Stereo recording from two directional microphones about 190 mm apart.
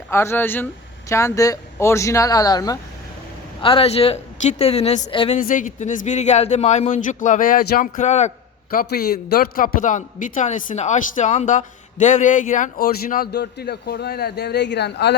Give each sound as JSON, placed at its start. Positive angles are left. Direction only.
{"t": 0.1, "sound": "a man's voice", "side_deg": 15}
{"t": 5.4, "sound": "a man's voice", "side_deg": 45}
{"t": 8.7, "sound": "a man's voice", "side_deg": 50}